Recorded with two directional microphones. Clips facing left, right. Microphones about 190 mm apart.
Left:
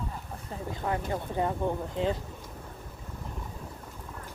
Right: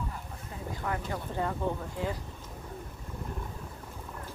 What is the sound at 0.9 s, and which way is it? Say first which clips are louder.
Speech: left 4 dB; 20° left (ahead or behind).